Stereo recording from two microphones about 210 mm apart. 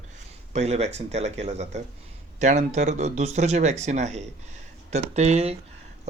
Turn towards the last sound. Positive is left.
turn(degrees=-30)  # may be behind; listen again after turning